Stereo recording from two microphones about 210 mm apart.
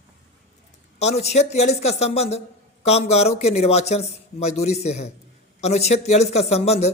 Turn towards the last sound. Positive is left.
turn(degrees=30)  # may be behind; listen again after turning